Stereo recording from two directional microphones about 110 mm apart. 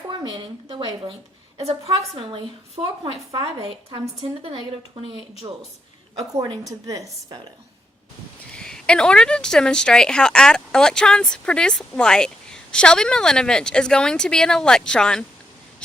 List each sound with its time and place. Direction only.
0.1 s speech: 45° right (ahead or behind)
1.5 s a woman's voice: 65° right (ahead or behind)
4.4 s a woman's voice: 60° right (ahead or behind)
5.4 s a woman's voice: 40° right (ahead or behind)
8.5 s speech: 5° left (ahead or behind)